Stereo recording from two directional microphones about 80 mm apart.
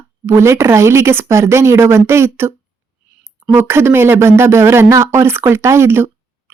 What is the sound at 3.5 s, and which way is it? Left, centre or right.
Speech, right.